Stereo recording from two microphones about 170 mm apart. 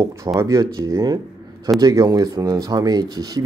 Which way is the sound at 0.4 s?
20° right (ahead or behind).